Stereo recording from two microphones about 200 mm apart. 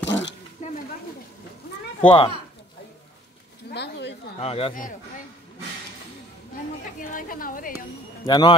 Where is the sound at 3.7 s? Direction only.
60° left (ahead or behind).